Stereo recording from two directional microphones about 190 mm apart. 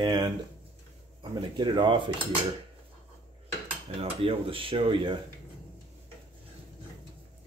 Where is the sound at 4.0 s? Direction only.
30° right (ahead or behind).